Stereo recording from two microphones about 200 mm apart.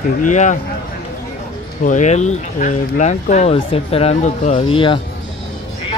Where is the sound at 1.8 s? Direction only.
40° left (ahead or behind).